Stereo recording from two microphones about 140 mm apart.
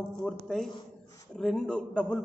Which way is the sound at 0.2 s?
5° left (ahead or behind).